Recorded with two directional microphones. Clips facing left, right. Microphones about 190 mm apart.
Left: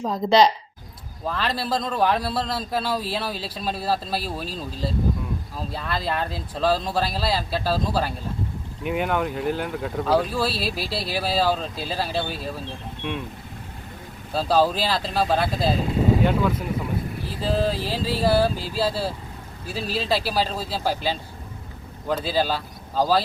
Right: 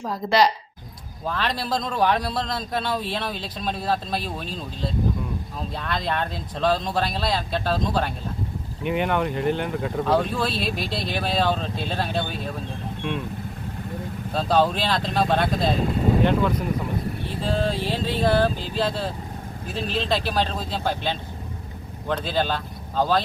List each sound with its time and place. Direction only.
0.0 s a woman's voice: 20° left (ahead or behind)
1.2 s speech: centre (ahead or behind)
14.3 s speech: 5° left (ahead or behind)